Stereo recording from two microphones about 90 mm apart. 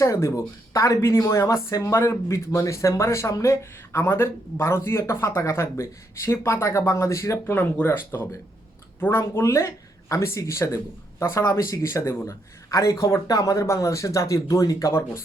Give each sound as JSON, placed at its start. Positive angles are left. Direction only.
{"t": 0.0, "sound": "speech", "side_deg": 35}